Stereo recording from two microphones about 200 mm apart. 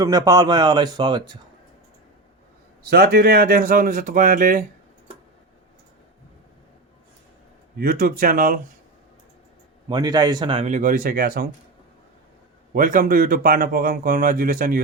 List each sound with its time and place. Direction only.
0.0 s speech: 20° right (ahead or behind)
2.9 s speech: 50° right (ahead or behind)
7.8 s speech: 45° right (ahead or behind)
9.9 s speech: 20° right (ahead or behind); by 11.4 s 45° right (ahead or behind)
12.7 s speech: 45° right (ahead or behind)